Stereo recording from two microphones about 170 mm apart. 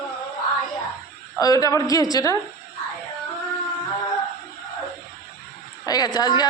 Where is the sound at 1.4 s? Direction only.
20° left (ahead or behind).